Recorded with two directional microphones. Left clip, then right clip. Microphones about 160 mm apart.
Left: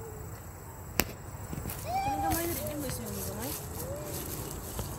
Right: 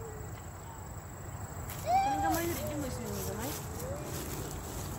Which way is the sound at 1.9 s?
10° right (ahead or behind).